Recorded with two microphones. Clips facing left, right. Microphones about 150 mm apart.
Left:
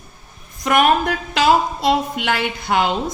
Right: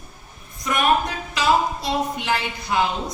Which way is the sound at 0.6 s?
75° left (ahead or behind).